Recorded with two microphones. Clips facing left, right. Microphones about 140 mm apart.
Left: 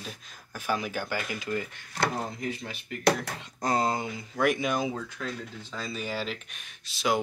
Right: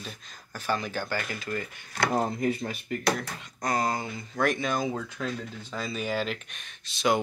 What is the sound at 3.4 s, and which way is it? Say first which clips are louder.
Speech: left 1 dB; 30° left (ahead or behind).